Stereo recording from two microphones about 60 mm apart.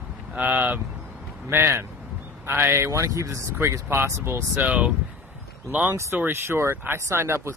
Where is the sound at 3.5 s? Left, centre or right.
Right.